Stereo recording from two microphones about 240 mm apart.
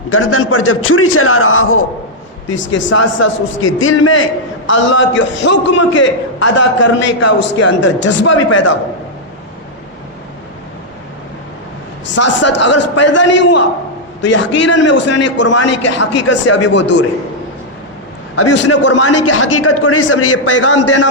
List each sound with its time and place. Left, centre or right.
0.1 s a man's voice: left
12.1 s a man's voice: left
18.3 s a man's voice: left
18.8 s a man's voice: left
19.0 s a man's voice: left
20.6 s a man's voice: left